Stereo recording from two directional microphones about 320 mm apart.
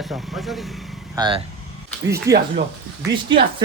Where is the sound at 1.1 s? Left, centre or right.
Centre.